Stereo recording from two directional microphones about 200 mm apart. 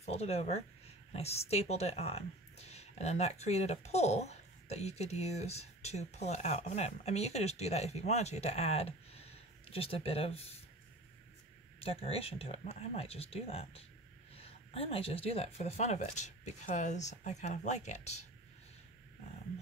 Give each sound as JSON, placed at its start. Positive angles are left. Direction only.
{"t": 0.0, "sound": "a woman's voice", "side_deg": 30}
{"t": 11.8, "sound": "a woman's voice", "side_deg": 30}